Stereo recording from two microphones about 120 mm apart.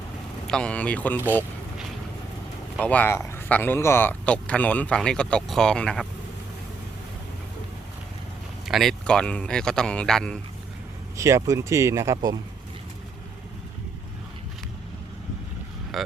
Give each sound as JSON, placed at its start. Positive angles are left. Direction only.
{"t": 0.4, "sound": "speech", "side_deg": 10}
{"t": 2.8, "sound": "speech", "side_deg": 15}
{"t": 8.6, "sound": "speech", "side_deg": 0}
{"t": 11.2, "sound": "speech", "side_deg": -25}
{"t": 15.9, "sound": "speech", "side_deg": 0}